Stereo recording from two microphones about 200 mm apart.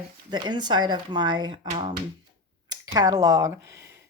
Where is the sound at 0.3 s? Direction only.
20° right (ahead or behind).